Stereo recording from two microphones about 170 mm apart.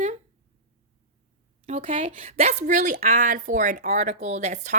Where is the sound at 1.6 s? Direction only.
35° right (ahead or behind).